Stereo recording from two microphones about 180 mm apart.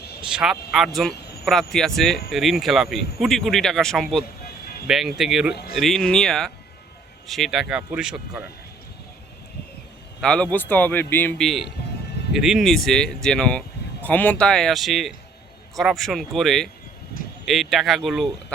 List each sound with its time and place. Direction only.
0.2 s speech: 5° right (ahead or behind)
4.4 s music: 60° left (ahead or behind)
4.9 s speech: centre (ahead or behind)
10.2 s a man's voice: 5° left (ahead or behind)